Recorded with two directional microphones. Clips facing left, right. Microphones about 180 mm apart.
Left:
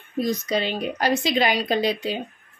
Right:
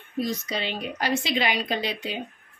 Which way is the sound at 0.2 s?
40° left (ahead or behind).